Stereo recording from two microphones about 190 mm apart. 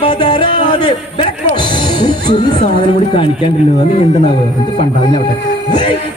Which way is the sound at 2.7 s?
25° left (ahead or behind).